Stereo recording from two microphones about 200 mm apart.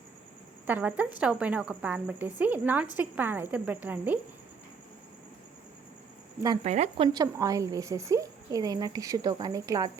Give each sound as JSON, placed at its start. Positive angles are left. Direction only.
{"t": 0.7, "sound": "a woman's voice", "side_deg": -10}
{"t": 6.7, "sound": "a woman's voice", "side_deg": -35}